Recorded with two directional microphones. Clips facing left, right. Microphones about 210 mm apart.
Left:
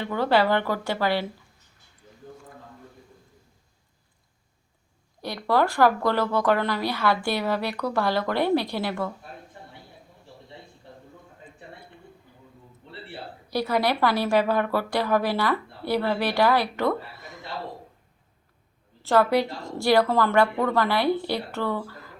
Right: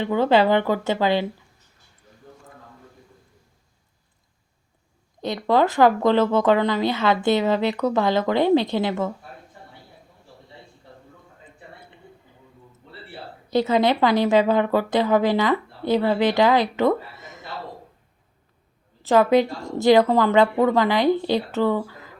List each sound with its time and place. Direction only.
0.0 s speech: 20° right (ahead or behind)
5.2 s speech: 20° right (ahead or behind)
13.5 s speech: 20° right (ahead or behind)
19.0 s a woman's voice: 15° right (ahead or behind)